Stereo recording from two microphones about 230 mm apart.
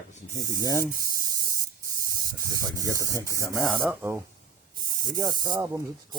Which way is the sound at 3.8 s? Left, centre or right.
Centre.